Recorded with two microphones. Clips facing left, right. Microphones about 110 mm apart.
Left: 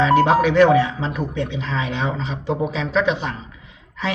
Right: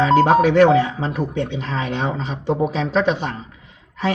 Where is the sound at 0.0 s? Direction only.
45° right (ahead or behind).